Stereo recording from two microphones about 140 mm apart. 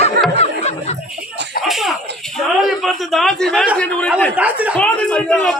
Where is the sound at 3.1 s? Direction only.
Centre (ahead or behind).